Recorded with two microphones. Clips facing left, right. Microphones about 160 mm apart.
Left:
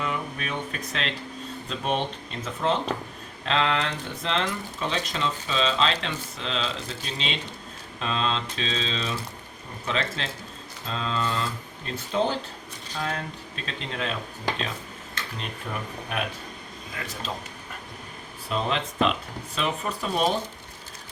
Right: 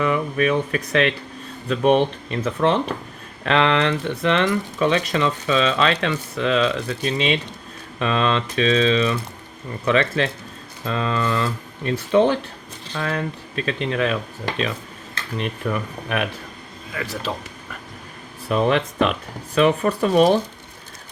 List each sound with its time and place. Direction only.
0.0 s speech: 75° right (ahead or behind)
15.6 s speech: 90° right
16.1 s speech: 70° right (ahead or behind)
18.4 s speech: 65° right (ahead or behind)